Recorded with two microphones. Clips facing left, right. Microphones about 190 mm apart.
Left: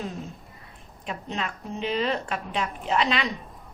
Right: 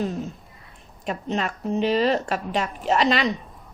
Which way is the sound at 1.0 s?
45° right (ahead or behind).